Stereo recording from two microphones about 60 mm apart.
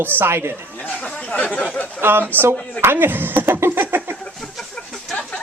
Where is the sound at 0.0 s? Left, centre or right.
Right.